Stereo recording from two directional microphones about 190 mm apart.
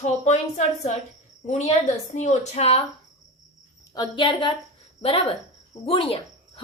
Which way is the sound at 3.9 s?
25° left (ahead or behind).